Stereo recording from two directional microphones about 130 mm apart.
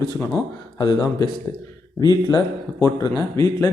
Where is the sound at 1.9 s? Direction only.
30° left (ahead or behind).